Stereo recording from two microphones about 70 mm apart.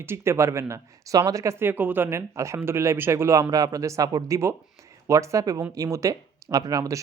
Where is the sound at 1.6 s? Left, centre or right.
Right.